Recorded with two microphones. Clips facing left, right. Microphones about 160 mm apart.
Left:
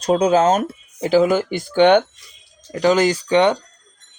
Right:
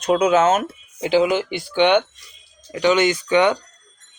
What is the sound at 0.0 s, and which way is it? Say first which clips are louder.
Speech: left 1 dB; 35° left (ahead or behind).